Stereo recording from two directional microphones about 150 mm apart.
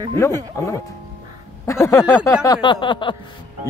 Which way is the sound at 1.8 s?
20° left (ahead or behind).